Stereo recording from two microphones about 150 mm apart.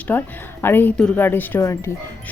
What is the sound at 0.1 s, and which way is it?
A woman's voice, 15° left (ahead or behind).